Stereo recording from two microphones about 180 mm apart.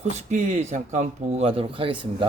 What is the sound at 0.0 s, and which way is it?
A man's voice, 40° right (ahead or behind).